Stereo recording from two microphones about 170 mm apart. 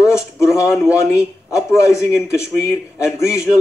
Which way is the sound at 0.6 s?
5° right (ahead or behind).